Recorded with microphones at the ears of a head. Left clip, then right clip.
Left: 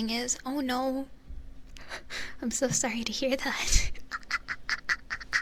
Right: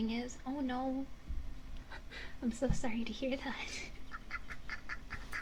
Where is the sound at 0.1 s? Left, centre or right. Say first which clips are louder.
Left 9 dB; left.